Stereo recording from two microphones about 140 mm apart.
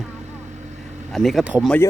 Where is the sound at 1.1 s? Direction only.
Centre (ahead or behind).